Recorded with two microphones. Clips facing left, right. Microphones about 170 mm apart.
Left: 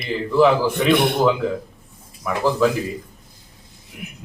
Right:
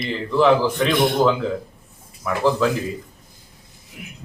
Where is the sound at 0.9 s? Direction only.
60° left (ahead or behind).